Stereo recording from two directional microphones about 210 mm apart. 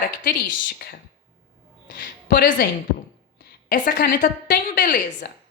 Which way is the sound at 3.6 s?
40° left (ahead or behind).